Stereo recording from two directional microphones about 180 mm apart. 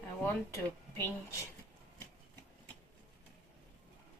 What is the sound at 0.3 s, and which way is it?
Speech, 15° left (ahead or behind).